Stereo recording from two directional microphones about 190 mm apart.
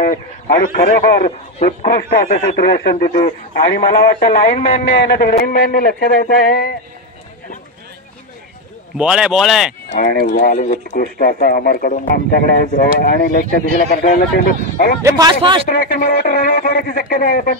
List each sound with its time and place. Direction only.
0.0 s a man's voice: 50° left (ahead or behind)
1.9 s speech: 55° left (ahead or behind)
3.1 s speech: 45° left (ahead or behind)
8.9 s speech: 5° right (ahead or behind)
9.9 s speech: 50° left (ahead or behind)
15.0 s speech: 15° right (ahead or behind)
15.7 s speech: 50° left (ahead or behind)